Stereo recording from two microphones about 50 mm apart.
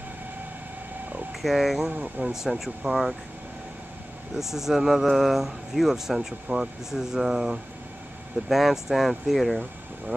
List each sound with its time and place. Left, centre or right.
1.4 s speech: centre
1.9 s speech: right
2.3 s speech: centre
4.4 s speech: centre